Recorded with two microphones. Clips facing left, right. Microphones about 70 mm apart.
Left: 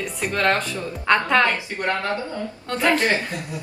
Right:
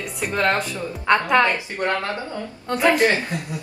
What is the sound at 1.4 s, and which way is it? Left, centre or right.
A woman's voice, right.